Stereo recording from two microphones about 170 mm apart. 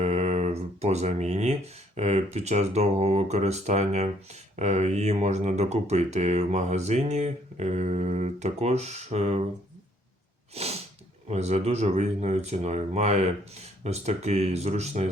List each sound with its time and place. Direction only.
0.0 s speech: 40° right (ahead or behind)
10.5 s sneeze: 35° right (ahead or behind)
11.3 s speech: 40° right (ahead or behind)